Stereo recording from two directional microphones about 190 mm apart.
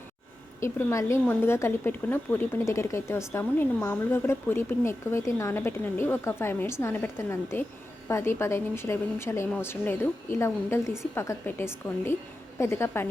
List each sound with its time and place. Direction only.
0.6 s a woman's voice: 15° left (ahead or behind)